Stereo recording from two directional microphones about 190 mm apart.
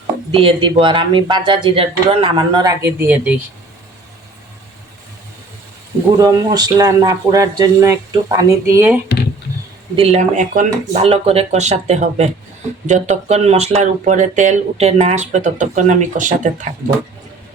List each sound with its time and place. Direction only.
0.3 s speech: 30° right (ahead or behind); by 3.4 s 10° right (ahead or behind)
6.1 s speech: 20° right (ahead or behind)
9.9 s speech: 30° right (ahead or behind)
11.0 s speech: 30° right (ahead or behind)